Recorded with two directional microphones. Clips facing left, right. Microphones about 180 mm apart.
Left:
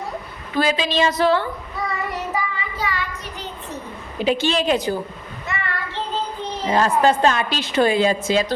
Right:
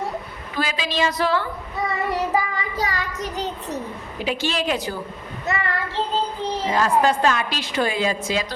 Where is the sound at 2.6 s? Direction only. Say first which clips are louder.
Right 1 dB; 40° right (ahead or behind).